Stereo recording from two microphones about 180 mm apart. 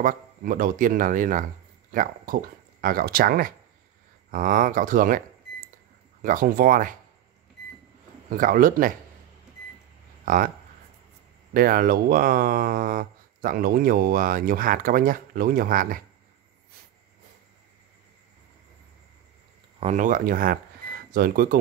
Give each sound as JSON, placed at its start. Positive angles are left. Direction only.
{"t": 0.0, "sound": "speech", "side_deg": -50}
{"t": 8.3, "sound": "speech", "side_deg": -50}
{"t": 10.2, "sound": "speech", "side_deg": -50}
{"t": 11.5, "sound": "speech", "side_deg": -55}
{"t": 19.8, "sound": "speech", "side_deg": -40}